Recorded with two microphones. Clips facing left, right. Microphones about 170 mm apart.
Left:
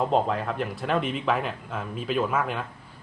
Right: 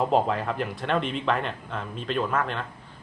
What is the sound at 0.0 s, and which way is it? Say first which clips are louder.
Speech: right 1 dB; centre (ahead or behind).